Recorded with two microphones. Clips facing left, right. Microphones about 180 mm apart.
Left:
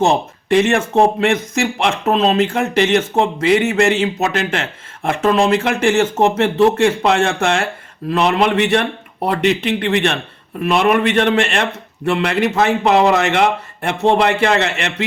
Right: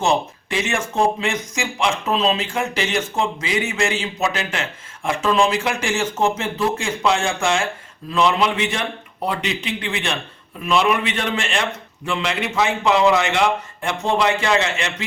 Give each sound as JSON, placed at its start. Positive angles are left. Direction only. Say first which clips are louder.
{"t": 0.0, "sound": "speech", "louder": "left 4 dB", "side_deg": 55}